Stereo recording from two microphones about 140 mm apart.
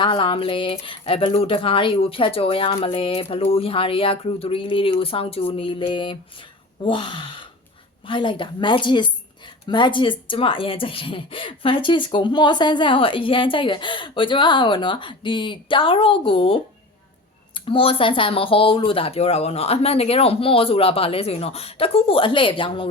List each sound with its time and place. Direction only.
0.0 s speech: 35° left (ahead or behind)